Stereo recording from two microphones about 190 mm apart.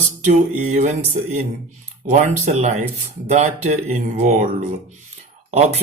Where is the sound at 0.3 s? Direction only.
40° right (ahead or behind).